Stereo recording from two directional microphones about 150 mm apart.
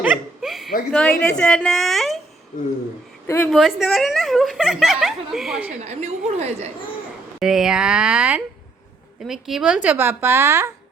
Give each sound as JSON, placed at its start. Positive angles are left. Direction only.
{"t": 0.0, "sound": "chuckle", "side_deg": -5}
{"t": 0.9, "sound": "a woman's voice", "side_deg": 5}
{"t": 3.2, "sound": "speech", "side_deg": 15}
{"t": 3.5, "sound": "a woman's voice", "side_deg": 0}
{"t": 5.8, "sound": "a woman's voice", "side_deg": -45}
{"t": 7.3, "sound": "a woman's voice", "side_deg": -5}